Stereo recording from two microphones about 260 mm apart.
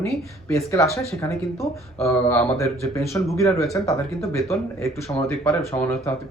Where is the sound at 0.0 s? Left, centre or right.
Centre.